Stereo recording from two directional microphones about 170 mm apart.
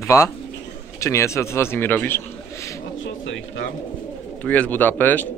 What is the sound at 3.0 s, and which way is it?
Pigeon, 90° left.